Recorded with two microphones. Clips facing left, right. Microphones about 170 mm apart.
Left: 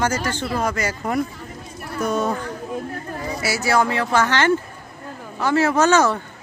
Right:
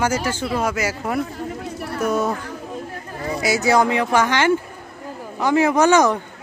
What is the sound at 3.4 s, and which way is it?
Speech, 20° right (ahead or behind).